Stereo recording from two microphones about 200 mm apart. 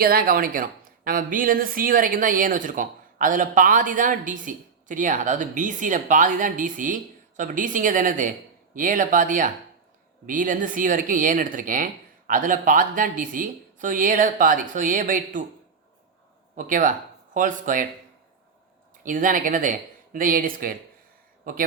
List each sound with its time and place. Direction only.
0.0 s speech: 50° right (ahead or behind)
16.6 s speech: 40° right (ahead or behind)
19.0 s speech: 40° right (ahead or behind)